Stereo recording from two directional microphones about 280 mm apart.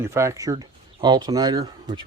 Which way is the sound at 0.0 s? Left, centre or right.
Centre.